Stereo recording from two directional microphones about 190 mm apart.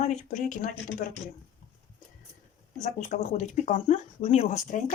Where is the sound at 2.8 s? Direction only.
40° left (ahead or behind).